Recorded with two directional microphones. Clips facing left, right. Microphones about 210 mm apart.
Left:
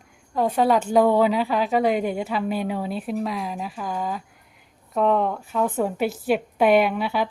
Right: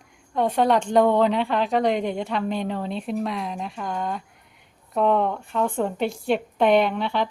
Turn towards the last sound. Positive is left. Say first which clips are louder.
# left 1 dB
turn(degrees=5)  # may be behind; listen again after turning